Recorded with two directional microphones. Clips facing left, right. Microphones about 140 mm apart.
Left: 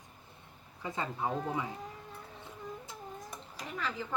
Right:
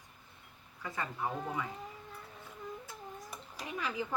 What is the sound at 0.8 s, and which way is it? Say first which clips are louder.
Speech: left 2 dB; 20° left (ahead or behind).